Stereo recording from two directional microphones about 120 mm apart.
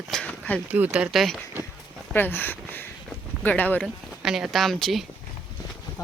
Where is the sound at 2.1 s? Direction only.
15° left (ahead or behind).